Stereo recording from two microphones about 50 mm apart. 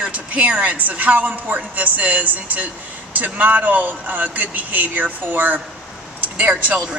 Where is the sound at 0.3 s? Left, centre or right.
Right.